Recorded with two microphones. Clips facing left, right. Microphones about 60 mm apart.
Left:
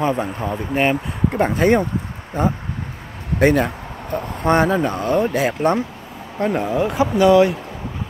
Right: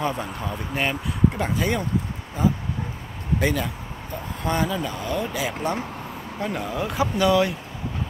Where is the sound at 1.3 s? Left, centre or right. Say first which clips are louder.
Left 9 dB; left.